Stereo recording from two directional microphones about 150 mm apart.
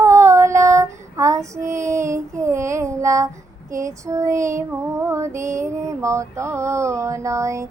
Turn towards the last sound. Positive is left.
turn(degrees=-20)  # may be behind; listen again after turning